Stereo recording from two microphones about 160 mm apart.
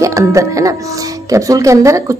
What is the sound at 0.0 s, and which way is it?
A woman's voice, 20° right (ahead or behind).